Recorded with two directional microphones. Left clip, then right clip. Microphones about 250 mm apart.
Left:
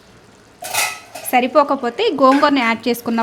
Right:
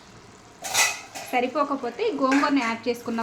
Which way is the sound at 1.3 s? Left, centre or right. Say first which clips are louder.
Left 10 dB; left.